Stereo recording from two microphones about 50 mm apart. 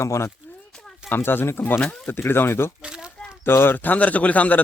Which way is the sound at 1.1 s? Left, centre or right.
Left.